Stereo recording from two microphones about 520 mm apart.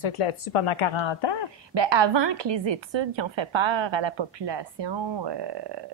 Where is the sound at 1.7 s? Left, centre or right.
Right.